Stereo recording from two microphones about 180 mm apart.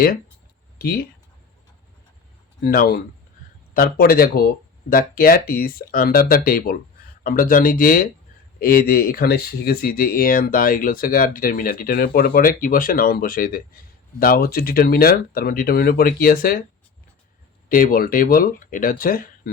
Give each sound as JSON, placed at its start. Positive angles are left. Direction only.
{"t": 0.8, "sound": "speech", "side_deg": 55}
{"t": 2.6, "sound": "speech", "side_deg": 55}
{"t": 17.7, "sound": "speech", "side_deg": 55}